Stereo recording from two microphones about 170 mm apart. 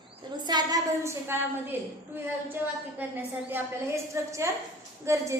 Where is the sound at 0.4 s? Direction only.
25° right (ahead or behind).